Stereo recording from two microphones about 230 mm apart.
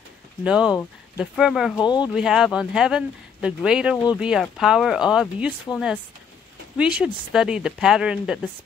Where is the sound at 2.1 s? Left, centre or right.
Centre.